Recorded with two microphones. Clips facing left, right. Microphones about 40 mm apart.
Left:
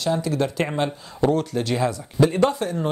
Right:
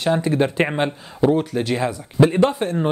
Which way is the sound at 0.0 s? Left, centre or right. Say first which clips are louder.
Right 4 dB; right.